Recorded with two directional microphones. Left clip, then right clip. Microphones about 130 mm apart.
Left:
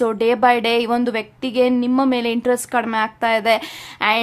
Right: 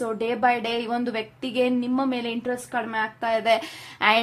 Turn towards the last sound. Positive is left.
turn(degrees=25)  # may be behind; listen again after turning